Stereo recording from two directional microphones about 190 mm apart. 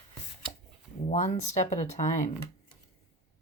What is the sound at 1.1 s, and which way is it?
Speech, 40° left (ahead or behind).